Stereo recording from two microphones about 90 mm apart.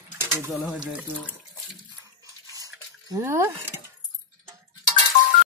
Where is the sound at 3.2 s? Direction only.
30° right (ahead or behind).